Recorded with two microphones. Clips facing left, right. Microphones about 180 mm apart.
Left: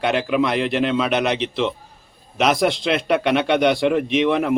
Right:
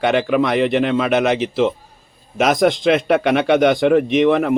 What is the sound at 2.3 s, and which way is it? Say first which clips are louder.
Speech: right 2 dB; 45° right (ahead or behind).